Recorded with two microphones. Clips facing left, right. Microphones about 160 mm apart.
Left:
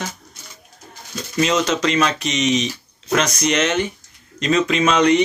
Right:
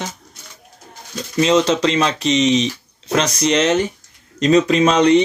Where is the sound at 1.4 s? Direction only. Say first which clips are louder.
Right 4 dB; 30° right (ahead or behind).